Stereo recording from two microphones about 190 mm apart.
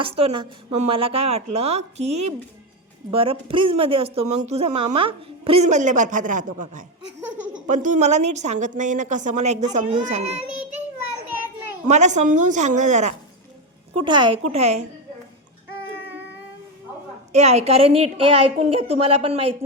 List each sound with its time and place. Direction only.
0.0 s a woman's voice: 30° right (ahead or behind)
11.9 s a woman's voice: 40° right (ahead or behind)
14.0 s a woman's voice: 25° right (ahead or behind)
17.3 s a woman's voice: 35° right (ahead or behind)